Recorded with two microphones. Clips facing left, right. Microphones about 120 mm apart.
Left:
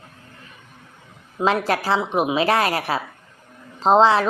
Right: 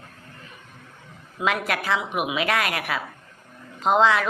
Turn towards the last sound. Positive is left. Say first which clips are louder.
# left 4 dB
turn(degrees=30)  # may be behind; listen again after turning